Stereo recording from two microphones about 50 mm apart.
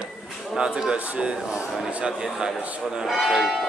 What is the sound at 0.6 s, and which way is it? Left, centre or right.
Speech, centre.